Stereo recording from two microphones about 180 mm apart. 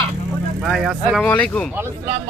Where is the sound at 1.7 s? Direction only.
15° right (ahead or behind).